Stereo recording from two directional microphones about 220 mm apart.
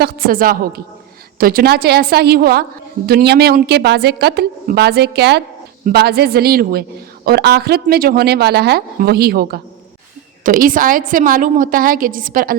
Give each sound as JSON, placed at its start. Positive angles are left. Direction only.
{"t": 0.0, "sound": "a woman's voice", "side_deg": -40}